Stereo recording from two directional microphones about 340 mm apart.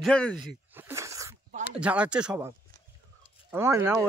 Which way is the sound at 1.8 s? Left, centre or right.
Centre.